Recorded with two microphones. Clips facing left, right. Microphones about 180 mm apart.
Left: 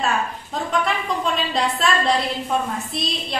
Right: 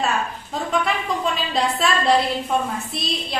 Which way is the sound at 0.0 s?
Centre (ahead or behind).